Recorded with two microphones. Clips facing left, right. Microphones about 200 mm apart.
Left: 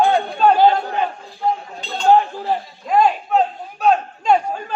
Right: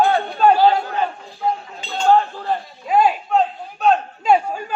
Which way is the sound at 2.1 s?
20° left (ahead or behind).